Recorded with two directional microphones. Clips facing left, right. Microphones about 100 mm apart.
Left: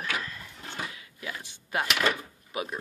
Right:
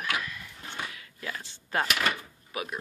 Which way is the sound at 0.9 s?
15° left (ahead or behind).